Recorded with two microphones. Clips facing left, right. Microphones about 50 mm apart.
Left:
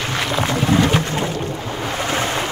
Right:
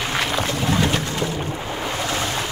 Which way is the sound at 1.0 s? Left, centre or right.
Left.